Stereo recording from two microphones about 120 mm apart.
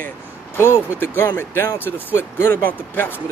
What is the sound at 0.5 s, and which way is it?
Speech, 20° left (ahead or behind).